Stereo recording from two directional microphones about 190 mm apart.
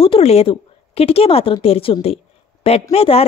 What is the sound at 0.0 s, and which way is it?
A woman's voice, 30° left (ahead or behind).